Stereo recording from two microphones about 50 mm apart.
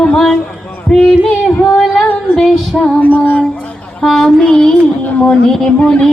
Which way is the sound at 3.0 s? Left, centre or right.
Left.